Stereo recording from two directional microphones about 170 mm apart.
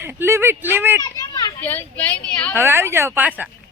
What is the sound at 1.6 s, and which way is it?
Speech, 10° left (ahead or behind).